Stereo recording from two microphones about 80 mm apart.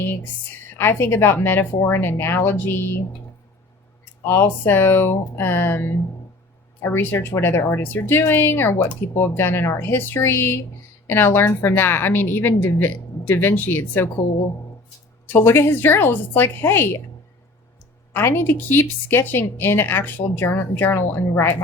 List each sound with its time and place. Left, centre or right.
0.8 s speech: left
4.2 s speech: left
15.3 s speech: left
18.1 s speech: left